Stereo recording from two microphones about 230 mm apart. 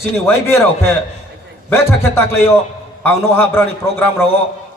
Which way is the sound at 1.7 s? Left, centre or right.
Centre.